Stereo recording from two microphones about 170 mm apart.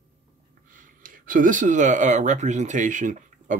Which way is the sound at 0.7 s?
50° right (ahead or behind).